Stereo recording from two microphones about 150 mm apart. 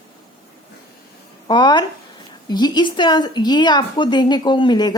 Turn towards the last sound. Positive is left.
turn(degrees=30)  # may be behind; listen again after turning